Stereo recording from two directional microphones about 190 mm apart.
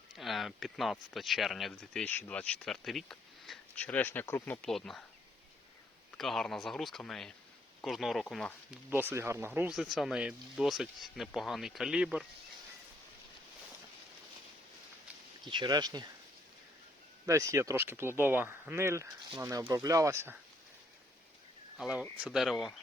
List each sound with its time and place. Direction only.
0.2 s speech: centre (ahead or behind)
6.1 s speech: centre (ahead or behind)
8.9 s speech: 10° right (ahead or behind)
15.4 s speech: 25° right (ahead or behind)
17.2 s speech: 15° right (ahead or behind)
21.8 s speech: 5° right (ahead or behind)